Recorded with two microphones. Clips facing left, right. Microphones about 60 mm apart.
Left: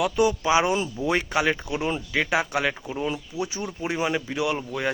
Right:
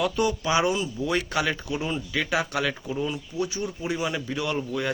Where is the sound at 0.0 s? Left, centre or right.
Centre.